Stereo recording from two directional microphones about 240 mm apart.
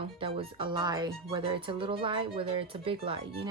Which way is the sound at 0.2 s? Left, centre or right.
Right.